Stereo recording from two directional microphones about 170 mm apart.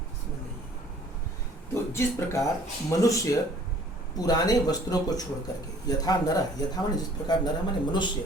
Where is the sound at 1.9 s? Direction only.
15° left (ahead or behind).